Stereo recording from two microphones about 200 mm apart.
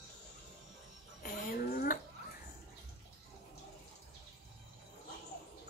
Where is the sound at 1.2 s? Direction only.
45° left (ahead or behind).